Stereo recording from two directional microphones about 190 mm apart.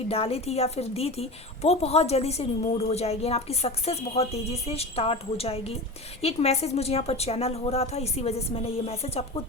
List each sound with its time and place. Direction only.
0.1 s a woman's voice: 30° left (ahead or behind)